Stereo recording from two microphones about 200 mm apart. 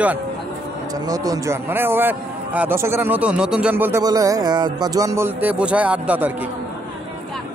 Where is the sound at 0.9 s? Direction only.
20° right (ahead or behind).